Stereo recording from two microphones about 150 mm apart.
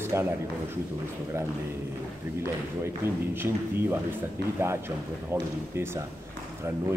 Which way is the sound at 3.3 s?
15° right (ahead or behind).